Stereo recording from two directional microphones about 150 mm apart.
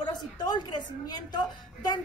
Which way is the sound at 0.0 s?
30° left (ahead or behind).